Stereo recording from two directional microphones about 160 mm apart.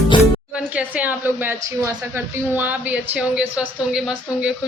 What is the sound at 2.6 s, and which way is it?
Speech, 5° right (ahead or behind).